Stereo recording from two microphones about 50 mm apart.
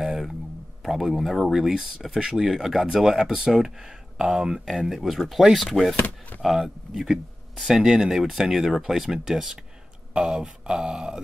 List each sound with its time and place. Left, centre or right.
0.0 s a sound: centre
0.8 s speech: centre
5.9 s speech: left
6.4 s speech: centre